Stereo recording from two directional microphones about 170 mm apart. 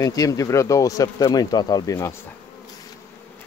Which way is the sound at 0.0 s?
20° left (ahead or behind).